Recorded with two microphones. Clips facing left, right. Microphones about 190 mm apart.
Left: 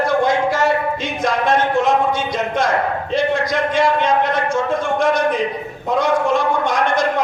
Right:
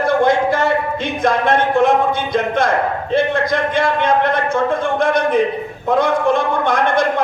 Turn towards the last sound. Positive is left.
turn(degrees=-55)  # may be behind; listen again after turning